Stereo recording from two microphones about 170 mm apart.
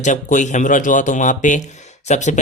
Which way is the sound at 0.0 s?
45° left (ahead or behind).